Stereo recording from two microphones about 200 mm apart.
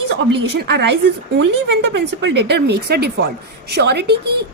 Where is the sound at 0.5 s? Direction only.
55° right (ahead or behind).